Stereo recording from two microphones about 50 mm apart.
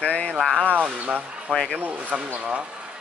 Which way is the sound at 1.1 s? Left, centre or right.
Right.